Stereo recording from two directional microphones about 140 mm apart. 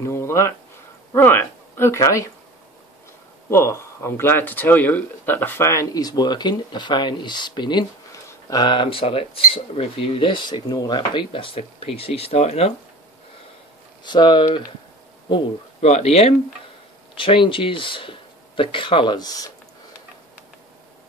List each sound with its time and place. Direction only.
0.0 s speech: 20° left (ahead or behind)
3.4 s speech: 20° left (ahead or behind); by 12.7 s 45° left (ahead or behind)
14.0 s speech: 35° left (ahead or behind)
15.8 s speech: 50° left (ahead or behind); by 19.5 s 25° left (ahead or behind)